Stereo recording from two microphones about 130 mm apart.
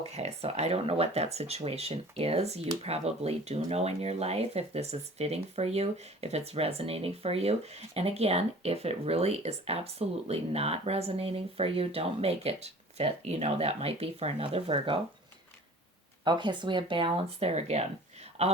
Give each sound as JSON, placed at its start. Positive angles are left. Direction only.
{"t": 0.0, "sound": "speech", "side_deg": -55}
{"t": 16.2, "sound": "speech", "side_deg": -35}
{"t": 17.5, "sound": "speech", "side_deg": -55}